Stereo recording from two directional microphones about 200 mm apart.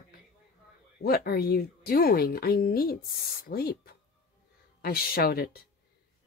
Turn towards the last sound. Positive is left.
turn(degrees=50)  # may be behind; listen again after turning